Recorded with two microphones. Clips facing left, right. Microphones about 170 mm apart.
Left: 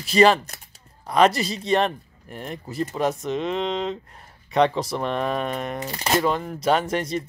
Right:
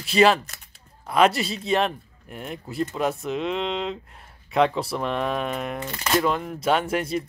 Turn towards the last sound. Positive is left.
turn(degrees=-5)  # may be behind; listen again after turning